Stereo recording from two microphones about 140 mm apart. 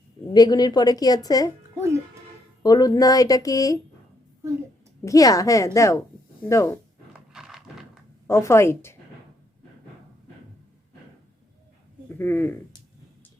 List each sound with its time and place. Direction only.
0.3 s a woman's voice: 30° left (ahead or behind)
1.7 s music: 20° right (ahead or behind)
2.6 s a woman's voice: 25° left (ahead or behind)
5.0 s a woman's voice: 25° left (ahead or behind)
7.1 s wild animals: 5° right (ahead or behind)
8.3 s a woman's voice: 20° left (ahead or behind)
12.1 s speech: 15° left (ahead or behind)